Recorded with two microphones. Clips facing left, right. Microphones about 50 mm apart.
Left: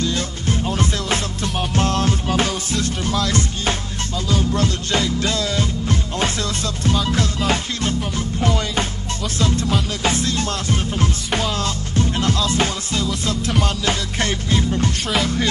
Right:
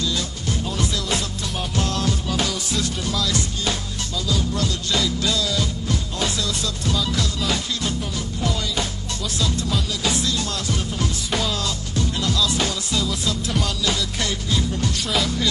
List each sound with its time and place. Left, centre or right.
0.0 s music: left